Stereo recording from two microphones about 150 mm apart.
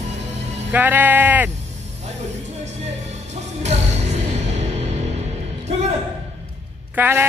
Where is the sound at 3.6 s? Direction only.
45° right (ahead or behind).